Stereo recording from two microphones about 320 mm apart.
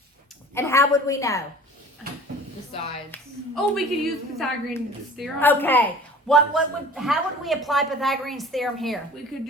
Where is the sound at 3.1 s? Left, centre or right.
Centre.